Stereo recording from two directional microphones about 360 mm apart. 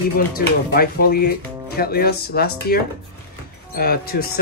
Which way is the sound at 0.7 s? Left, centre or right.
Left.